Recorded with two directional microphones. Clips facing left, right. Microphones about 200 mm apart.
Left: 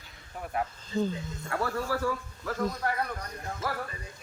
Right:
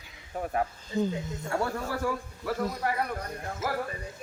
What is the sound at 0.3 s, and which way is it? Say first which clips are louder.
Speech: right 4 dB; 40° right (ahead or behind).